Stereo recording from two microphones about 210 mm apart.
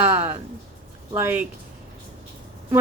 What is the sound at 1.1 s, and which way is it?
Speech, 10° right (ahead or behind).